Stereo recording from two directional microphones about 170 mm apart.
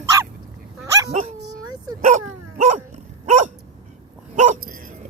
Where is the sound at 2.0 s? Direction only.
45° right (ahead or behind).